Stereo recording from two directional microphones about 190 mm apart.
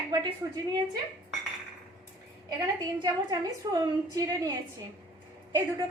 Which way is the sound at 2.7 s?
20° right (ahead or behind).